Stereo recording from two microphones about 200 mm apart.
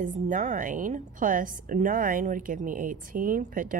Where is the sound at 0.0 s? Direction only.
40° right (ahead or behind).